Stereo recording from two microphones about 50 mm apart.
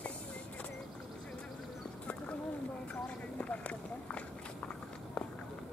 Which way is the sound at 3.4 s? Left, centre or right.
Left.